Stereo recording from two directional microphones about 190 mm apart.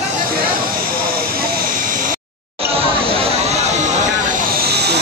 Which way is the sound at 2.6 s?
30° right (ahead or behind).